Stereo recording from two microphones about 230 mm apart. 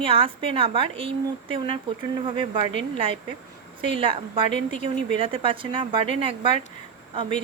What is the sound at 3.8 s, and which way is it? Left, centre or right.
A woman's voice, right.